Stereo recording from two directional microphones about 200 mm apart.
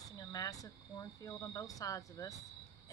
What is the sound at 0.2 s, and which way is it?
Speech, 20° left (ahead or behind).